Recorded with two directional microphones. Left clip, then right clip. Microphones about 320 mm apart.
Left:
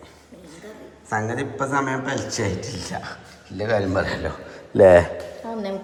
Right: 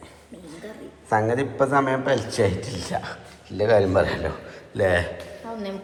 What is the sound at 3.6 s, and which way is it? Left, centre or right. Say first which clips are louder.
Speech: right 3 dB; centre.